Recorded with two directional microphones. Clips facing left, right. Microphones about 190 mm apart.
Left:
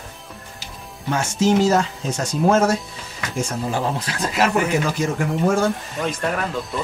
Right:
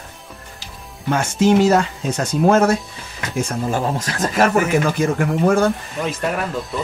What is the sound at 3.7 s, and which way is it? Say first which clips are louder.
Speech: right 2 dB; 45° right (ahead or behind).